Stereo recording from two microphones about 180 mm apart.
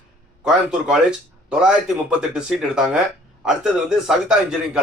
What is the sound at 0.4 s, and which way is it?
A man's voice, 5° right (ahead or behind).